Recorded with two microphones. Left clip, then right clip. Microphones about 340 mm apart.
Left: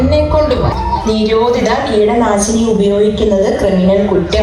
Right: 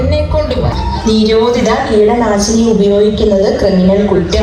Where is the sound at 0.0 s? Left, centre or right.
Centre.